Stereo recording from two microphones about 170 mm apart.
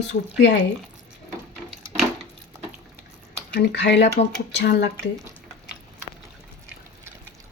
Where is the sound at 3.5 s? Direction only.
90° left.